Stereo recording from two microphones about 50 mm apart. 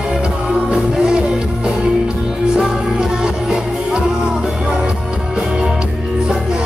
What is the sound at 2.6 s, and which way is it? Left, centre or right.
Music, centre.